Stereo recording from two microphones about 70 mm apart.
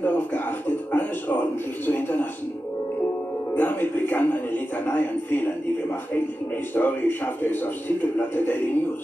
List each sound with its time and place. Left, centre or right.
0.0 s music: left
3.5 s a man's voice: left
6.7 s a man's voice: left